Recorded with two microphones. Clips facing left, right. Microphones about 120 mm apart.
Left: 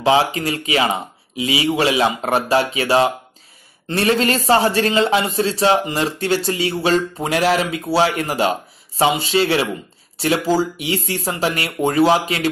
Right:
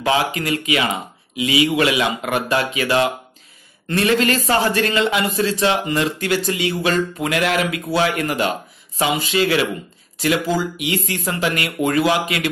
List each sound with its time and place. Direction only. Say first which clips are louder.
0.0 s a man's voice: left 3 dB; 30° left (ahead or behind)